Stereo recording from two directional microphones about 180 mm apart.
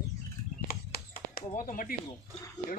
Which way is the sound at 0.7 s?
55° left (ahead or behind).